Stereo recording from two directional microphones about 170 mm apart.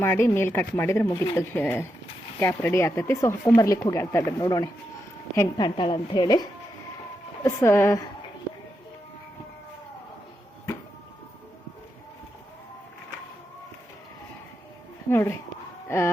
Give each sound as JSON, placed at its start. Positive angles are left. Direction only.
{"t": 0.0, "sound": "a woman's voice", "side_deg": 15}
{"t": 15.1, "sound": "speech", "side_deg": 15}